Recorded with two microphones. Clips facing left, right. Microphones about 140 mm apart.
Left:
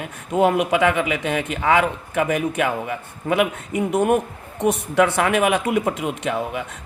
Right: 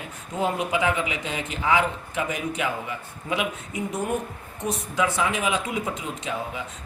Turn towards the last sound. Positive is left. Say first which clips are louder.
# left 6 dB
turn(degrees=65)  # may be behind; listen again after turning